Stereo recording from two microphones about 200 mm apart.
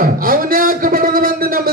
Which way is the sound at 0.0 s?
45° right (ahead or behind).